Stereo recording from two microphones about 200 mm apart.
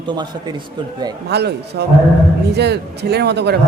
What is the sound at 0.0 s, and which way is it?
A man's voice, 25° right (ahead or behind).